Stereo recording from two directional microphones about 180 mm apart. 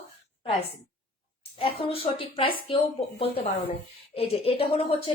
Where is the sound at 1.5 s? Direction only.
30° left (ahead or behind).